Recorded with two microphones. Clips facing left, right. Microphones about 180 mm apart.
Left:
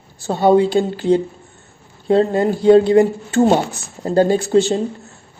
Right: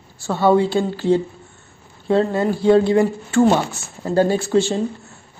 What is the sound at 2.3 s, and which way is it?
Speech, 20° left (ahead or behind).